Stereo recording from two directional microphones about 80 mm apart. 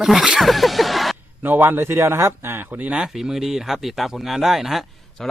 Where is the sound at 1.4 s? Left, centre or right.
Right.